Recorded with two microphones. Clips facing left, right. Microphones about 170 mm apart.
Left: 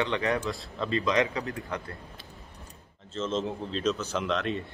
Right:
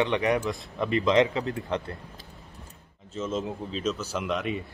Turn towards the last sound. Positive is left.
turn(degrees=-10)  # may be behind; listen again after turning